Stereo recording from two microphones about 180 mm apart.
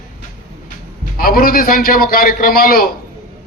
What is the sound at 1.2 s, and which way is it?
A man's voice, 55° left (ahead or behind).